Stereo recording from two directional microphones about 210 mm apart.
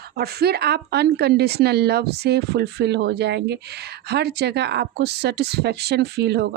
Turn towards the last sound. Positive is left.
turn(degrees=-50)  # may be behind; listen again after turning